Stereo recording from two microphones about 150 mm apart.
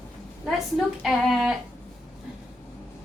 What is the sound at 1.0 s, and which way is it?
Speech, centre (ahead or behind).